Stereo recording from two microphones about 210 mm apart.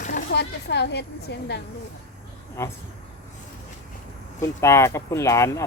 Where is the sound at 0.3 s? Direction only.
55° left (ahead or behind).